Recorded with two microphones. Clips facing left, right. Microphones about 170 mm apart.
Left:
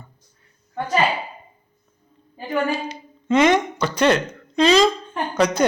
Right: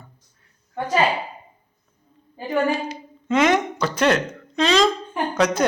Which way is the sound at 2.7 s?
Centre (ahead or behind).